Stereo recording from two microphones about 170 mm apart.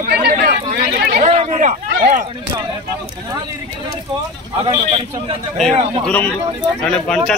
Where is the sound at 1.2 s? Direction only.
40° right (ahead or behind).